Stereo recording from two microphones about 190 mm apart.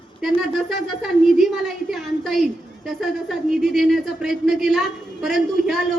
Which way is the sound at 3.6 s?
Centre (ahead or behind).